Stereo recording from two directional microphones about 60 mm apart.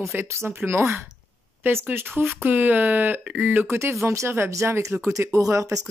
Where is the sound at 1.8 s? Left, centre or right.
Right.